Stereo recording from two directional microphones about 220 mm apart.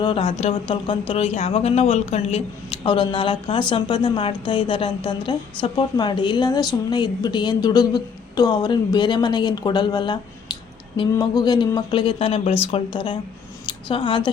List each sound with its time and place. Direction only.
0.0 s speech: 25° left (ahead or behind)